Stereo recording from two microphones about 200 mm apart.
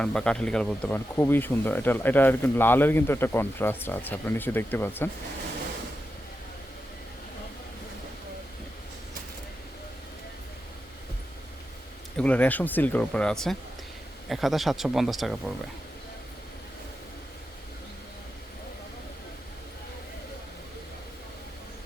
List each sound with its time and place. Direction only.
0.0 s speech: 5° left (ahead or behind)
12.1 s speech: 5° left (ahead or behind)